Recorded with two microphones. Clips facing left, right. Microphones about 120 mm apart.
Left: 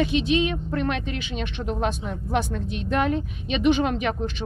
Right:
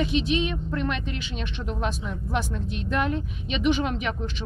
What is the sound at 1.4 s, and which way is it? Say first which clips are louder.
Speech: left 4 dB; 55° left (ahead or behind).